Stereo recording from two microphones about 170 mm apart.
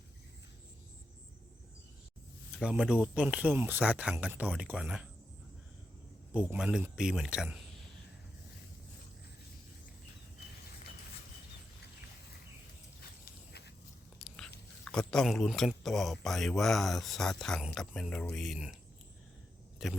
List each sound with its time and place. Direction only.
2.6 s speech: 5° right (ahead or behind)
6.3 s speech: 5° right (ahead or behind)
13.2 s a sound: 75° left (ahead or behind)
14.2 s biting: centre (ahead or behind)
14.8 s speech: 5° left (ahead or behind)
19.8 s speech: centre (ahead or behind)